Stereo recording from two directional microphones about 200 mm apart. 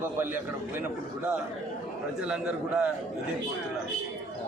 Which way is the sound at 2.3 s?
5° right (ahead or behind).